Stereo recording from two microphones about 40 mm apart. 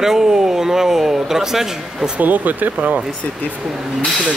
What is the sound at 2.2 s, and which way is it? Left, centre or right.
Speech, right.